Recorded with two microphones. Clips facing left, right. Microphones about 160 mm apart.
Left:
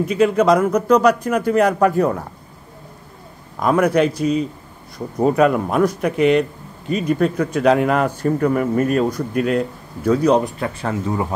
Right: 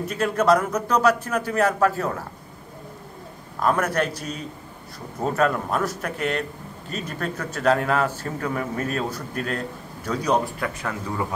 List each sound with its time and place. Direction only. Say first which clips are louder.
0.1 s speech: left 4 dB; 10° left (ahead or behind)
3.5 s speech: left 6 dB; 10° left (ahead or behind)
10.4 s speech: left 5 dB; 30° left (ahead or behind)